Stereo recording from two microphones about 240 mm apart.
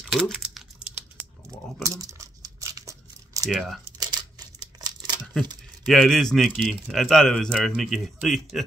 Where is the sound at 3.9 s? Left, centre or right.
Centre.